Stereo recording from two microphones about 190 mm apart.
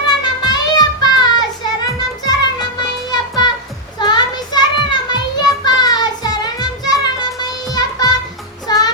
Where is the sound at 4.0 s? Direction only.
20° left (ahead or behind).